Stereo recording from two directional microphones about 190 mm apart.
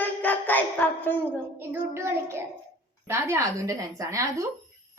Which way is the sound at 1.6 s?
15° right (ahead or behind).